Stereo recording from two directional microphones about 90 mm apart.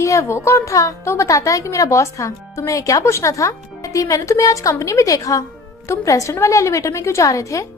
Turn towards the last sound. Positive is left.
turn(degrees=35)  # may be behind; listen again after turning